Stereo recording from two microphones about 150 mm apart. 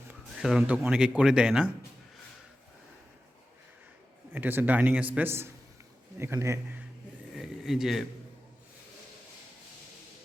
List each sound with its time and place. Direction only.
0.3 s speech: 5° right (ahead or behind)
4.3 s a man's voice: 15° right (ahead or behind)
7.3 s a sound: 5° right (ahead or behind)